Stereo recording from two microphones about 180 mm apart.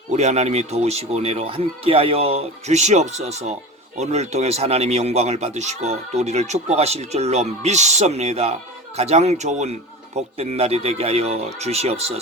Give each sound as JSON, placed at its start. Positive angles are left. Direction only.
{"t": 0.1, "sound": "speech", "side_deg": -40}